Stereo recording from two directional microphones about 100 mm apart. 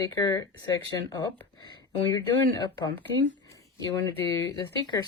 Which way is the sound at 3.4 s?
35° left (ahead or behind).